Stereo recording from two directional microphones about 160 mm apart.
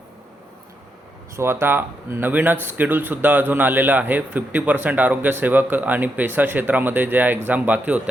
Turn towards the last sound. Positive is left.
turn(degrees=-10)  # may be behind; listen again after turning